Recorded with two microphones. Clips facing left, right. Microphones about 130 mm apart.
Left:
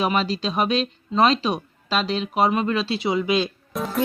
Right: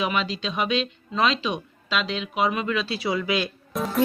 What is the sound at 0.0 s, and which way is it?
Speech, 40° left (ahead or behind).